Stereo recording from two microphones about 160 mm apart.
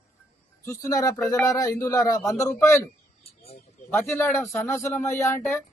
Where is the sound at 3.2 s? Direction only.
40° left (ahead or behind).